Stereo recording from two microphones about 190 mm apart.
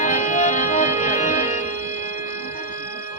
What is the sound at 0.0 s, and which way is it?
Music, 40° left (ahead or behind).